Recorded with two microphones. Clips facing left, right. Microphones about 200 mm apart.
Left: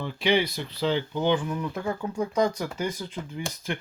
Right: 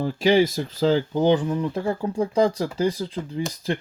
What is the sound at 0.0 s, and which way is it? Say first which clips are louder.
Speech: right 6 dB; 40° right (ahead or behind).